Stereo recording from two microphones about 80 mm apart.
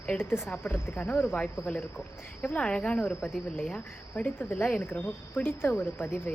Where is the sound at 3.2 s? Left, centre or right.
Centre.